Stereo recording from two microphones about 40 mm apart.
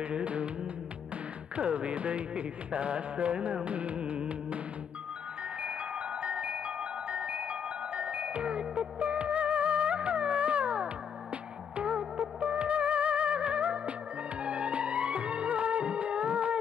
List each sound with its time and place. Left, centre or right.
0.0 s music: right
1.6 s music: right
6.2 s music: right